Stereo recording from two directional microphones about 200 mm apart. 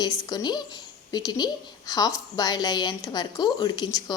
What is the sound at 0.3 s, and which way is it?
A woman's voice, 20° left (ahead or behind).